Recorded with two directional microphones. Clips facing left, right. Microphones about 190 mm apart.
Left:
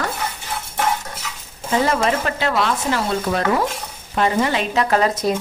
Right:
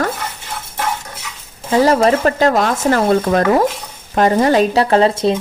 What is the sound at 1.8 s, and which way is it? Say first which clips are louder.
Speech: right 8 dB; 35° right (ahead or behind).